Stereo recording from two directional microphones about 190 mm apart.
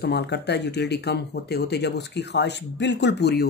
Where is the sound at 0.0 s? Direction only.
60° left (ahead or behind).